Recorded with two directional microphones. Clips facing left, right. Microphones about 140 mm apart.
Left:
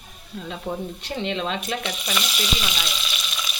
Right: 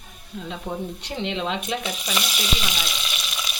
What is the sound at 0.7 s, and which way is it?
Frying, 10° right (ahead or behind).